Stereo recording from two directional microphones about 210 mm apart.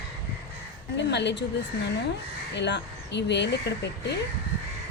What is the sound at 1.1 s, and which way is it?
Speech, 55° left (ahead or behind).